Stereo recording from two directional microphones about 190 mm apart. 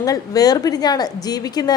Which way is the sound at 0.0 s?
20° left (ahead or behind).